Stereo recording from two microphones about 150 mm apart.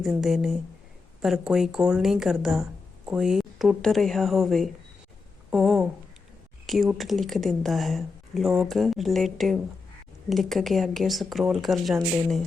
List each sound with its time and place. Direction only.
0.0 s speech: centre (ahead or behind)
5.5 s a sound: 5° right (ahead or behind)
6.7 s speech: centre (ahead or behind)